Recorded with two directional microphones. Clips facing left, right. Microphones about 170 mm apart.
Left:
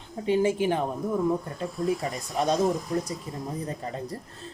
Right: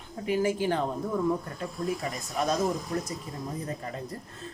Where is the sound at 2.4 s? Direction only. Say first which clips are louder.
Left 3 dB; 30° left (ahead or behind).